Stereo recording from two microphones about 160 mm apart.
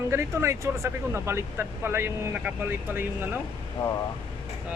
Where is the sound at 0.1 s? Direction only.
15° right (ahead or behind).